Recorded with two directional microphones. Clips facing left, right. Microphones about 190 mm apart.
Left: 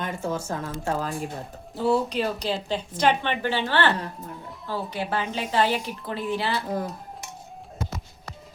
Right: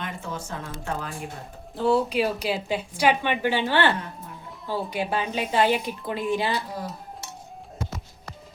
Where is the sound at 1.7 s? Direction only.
Centre (ahead or behind); by 6.6 s 15° right (ahead or behind).